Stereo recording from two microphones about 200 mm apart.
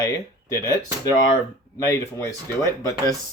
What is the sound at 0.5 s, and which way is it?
Speech, 15° left (ahead or behind).